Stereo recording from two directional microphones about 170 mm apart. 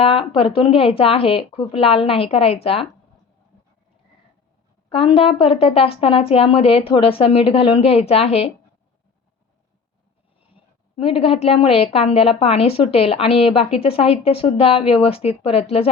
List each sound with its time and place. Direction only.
0.0 s a woman's voice: 35° left (ahead or behind)
4.9 s a woman's voice: 35° left (ahead or behind)
10.5 s a woman's voice: 35° left (ahead or behind)